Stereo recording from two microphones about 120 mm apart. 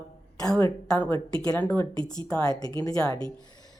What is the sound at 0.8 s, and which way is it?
Mantra, 10° left (ahead or behind).